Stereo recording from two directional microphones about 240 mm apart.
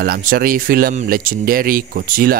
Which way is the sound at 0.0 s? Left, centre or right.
Right.